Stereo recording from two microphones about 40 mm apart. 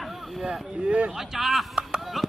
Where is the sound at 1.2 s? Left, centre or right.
Centre.